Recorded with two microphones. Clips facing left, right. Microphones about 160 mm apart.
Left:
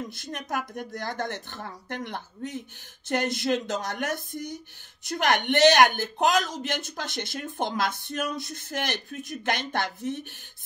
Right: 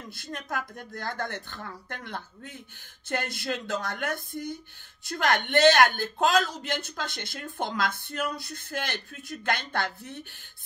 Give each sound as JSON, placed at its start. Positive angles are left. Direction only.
{"t": 0.1, "sound": "speech", "side_deg": 20}